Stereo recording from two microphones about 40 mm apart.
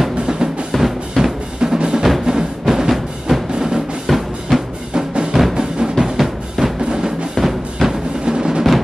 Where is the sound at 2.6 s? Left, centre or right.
Centre.